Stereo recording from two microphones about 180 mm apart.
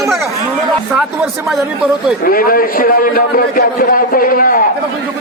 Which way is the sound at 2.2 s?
55° left (ahead or behind).